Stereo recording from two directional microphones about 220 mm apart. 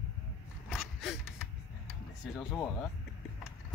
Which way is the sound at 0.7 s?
Centre (ahead or behind).